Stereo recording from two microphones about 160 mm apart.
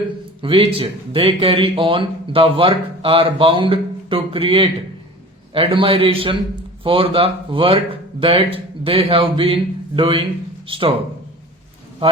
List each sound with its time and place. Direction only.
0.4 s speech: 35° right (ahead or behind)